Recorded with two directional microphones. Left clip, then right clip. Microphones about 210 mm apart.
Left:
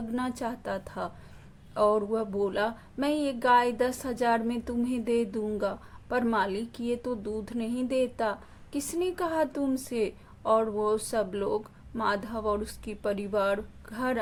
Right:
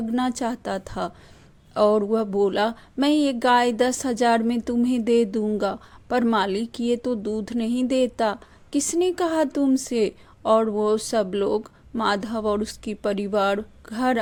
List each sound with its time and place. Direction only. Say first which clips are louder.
0.1 s speech: right 7 dB; 35° right (ahead or behind)